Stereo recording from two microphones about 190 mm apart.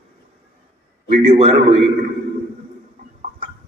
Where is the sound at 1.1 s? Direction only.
35° right (ahead or behind).